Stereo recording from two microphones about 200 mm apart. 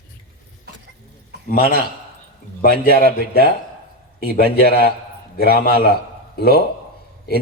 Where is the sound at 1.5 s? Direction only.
45° left (ahead or behind).